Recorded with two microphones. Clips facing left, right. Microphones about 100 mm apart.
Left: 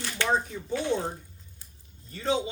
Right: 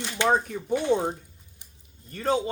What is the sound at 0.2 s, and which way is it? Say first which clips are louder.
Speech: right 4 dB; 20° right (ahead or behind).